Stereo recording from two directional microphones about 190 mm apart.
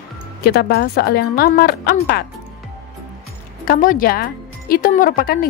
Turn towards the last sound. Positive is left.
turn(degrees=50)  # may be behind; listen again after turning